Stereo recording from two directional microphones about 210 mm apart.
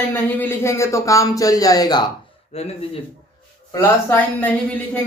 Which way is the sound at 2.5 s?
30° left (ahead or behind).